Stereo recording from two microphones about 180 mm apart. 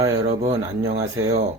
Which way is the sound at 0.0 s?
15° right (ahead or behind).